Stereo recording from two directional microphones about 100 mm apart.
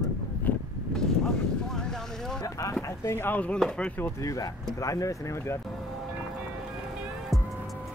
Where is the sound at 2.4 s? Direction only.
35° left (ahead or behind); by 4.0 s 10° left (ahead or behind).